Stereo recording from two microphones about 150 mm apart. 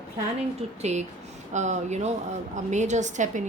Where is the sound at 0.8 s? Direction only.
50° right (ahead or behind).